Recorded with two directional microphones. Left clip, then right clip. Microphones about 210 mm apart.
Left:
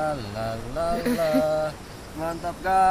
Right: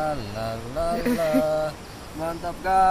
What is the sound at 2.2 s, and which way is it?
Speech, 5° right (ahead or behind).